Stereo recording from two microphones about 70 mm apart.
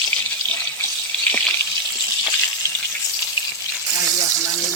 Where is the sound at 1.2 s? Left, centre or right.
Centre.